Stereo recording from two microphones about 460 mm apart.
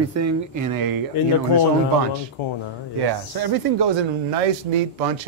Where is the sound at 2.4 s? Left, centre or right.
Left.